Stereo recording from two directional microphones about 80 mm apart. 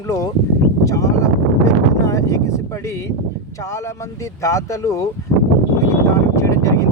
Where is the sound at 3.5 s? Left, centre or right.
Left.